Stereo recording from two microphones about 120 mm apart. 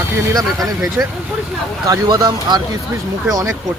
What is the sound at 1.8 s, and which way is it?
A man's voice, 30° right (ahead or behind).